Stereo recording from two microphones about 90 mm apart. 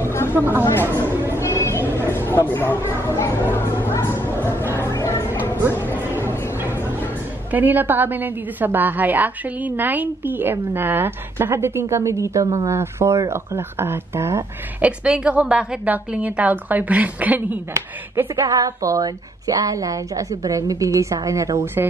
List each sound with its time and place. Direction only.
0.1 s a sound: 30° left (ahead or behind)
0.4 s a woman's voice: 25° right (ahead or behind)
1.0 s a sound: 25° right (ahead or behind)
1.4 s a sound: 30° left (ahead or behind)
2.5 s speech: 25° left (ahead or behind)
4.7 s music: 30° left (ahead or behind)
5.6 s music: 25° right (ahead or behind)
7.5 s a woman's voice: 20° right (ahead or behind)
14.8 s a woman's voice: 10° right (ahead or behind)
17.7 s speech: 35° right (ahead or behind)